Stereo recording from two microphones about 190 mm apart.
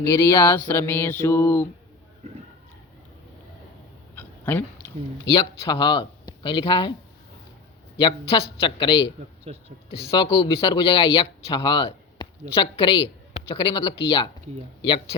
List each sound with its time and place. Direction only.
0.1 s mantra: 15° left (ahead or behind)
4.1 s a sound: 10° left (ahead or behind)
5.3 s speech: 25° left (ahead or behind)
7.9 s speech: 25° left (ahead or behind)
9.4 s speech: 35° right (ahead or behind)
9.9 s speech: 30° left (ahead or behind)